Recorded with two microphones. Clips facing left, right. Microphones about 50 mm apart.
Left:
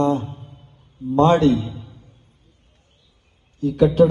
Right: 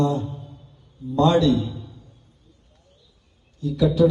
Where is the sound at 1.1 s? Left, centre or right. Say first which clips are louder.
Left 3 dB; left.